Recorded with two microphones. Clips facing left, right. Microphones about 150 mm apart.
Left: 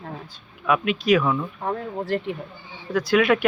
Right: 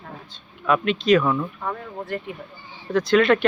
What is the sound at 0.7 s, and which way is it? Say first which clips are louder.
Speech: right 1 dB; 10° left (ahead or behind).